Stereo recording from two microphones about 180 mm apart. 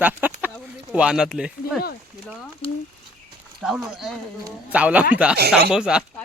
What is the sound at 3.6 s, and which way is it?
Speech, centre (ahead or behind).